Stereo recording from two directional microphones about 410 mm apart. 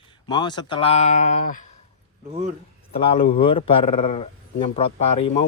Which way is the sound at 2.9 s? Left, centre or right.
Centre.